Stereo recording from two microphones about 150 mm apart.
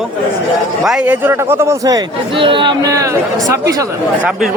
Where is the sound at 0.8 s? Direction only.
5° right (ahead or behind).